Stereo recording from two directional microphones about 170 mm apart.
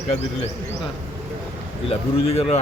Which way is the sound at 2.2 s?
35° left (ahead or behind).